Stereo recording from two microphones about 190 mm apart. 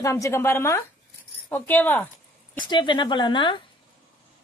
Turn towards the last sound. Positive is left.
turn(degrees=25)  # may be behind; listen again after turning